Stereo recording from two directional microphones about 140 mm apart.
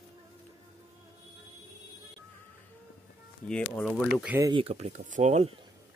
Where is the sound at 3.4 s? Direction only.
5° left (ahead or behind).